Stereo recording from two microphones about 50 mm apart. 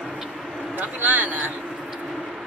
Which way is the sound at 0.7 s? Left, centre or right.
Right.